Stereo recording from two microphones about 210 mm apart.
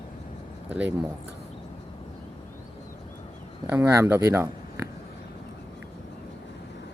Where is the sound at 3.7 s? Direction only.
10° right (ahead or behind).